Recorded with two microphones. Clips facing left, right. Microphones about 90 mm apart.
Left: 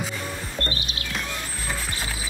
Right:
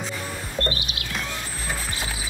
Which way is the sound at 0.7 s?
35° left (ahead or behind).